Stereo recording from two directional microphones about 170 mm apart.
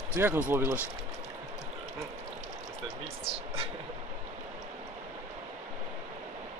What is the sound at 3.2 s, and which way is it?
Vehicle, 35° right (ahead or behind).